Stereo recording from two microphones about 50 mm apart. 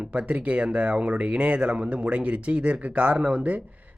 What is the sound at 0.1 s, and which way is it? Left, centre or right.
Speech, right.